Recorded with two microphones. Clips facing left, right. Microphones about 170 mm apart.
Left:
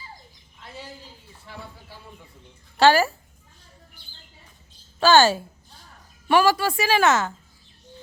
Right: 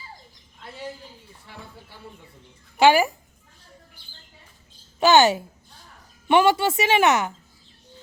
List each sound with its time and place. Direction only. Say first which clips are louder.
2.7 s speech: right 1 dB; 15° right (ahead or behind)
4.9 s a woman's voice: even; 20° right (ahead or behind)